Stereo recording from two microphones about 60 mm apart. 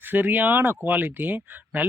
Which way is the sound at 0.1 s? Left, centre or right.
Right.